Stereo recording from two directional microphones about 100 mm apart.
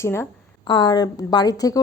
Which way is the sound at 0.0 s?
25° left (ahead or behind).